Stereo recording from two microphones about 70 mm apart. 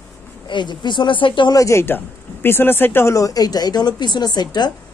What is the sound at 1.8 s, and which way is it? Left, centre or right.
Speech, left.